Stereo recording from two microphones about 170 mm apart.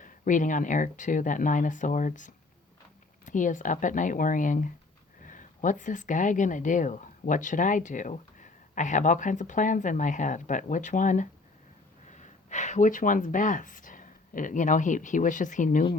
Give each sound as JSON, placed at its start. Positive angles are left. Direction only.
{"t": 0.0, "sound": "speech", "side_deg": 50}